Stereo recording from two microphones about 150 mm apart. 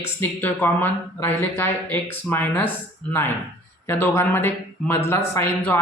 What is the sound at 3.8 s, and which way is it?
Speech, 15° left (ahead or behind).